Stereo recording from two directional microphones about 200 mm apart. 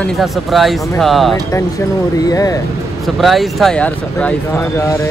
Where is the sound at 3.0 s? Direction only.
Centre (ahead or behind).